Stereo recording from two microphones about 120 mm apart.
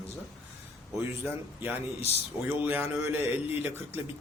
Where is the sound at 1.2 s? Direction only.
15° right (ahead or behind).